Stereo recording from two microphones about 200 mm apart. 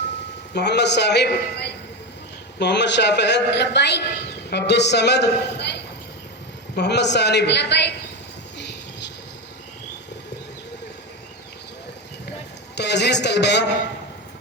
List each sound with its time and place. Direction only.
0.5 s a man's voice: 55° left (ahead or behind)
8.5 s a sound: 60° left (ahead or behind)
12.7 s a man's voice: 60° left (ahead or behind)